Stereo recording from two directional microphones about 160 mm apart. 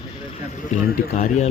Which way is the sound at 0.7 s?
45° left (ahead or behind).